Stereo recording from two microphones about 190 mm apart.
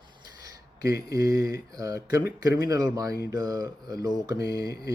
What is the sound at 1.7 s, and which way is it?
Speech, 15° right (ahead or behind).